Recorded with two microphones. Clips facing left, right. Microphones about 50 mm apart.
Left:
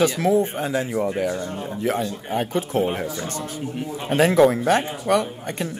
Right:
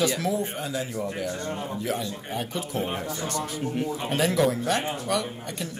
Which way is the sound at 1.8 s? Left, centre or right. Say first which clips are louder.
Left 9 dB; left.